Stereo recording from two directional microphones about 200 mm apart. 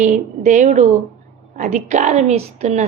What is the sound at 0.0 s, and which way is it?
A woman's voice, 40° right (ahead or behind).